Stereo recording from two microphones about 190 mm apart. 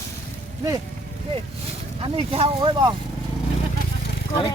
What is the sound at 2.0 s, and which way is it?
Speech, 30° right (ahead or behind).